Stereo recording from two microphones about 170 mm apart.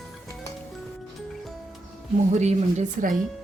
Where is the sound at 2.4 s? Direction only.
45° right (ahead or behind).